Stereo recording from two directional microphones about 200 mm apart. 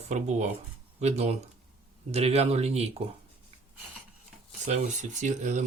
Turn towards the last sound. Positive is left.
turn(degrees=-35)  # may be behind; listen again after turning